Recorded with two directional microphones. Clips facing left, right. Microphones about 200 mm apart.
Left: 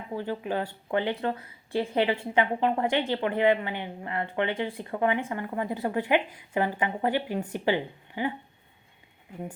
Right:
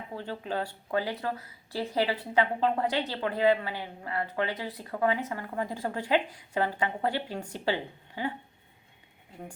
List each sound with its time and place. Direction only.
0.2 s speech: 15° left (ahead or behind)